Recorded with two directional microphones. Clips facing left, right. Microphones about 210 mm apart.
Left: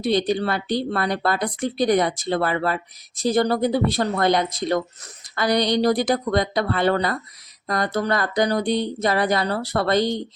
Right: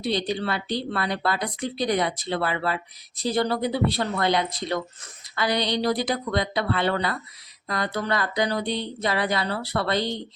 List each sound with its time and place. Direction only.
0.0 s speech: 50° left (ahead or behind)